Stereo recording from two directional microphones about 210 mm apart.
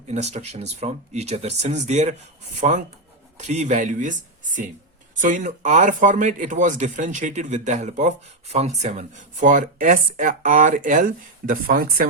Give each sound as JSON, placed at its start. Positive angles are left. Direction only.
{"t": 0.1, "sound": "speech", "side_deg": -30}
{"t": 5.2, "sound": "speech", "side_deg": -35}